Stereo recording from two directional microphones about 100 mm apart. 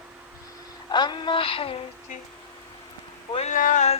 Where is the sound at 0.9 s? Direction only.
45° left (ahead or behind); by 1.8 s 65° left (ahead or behind).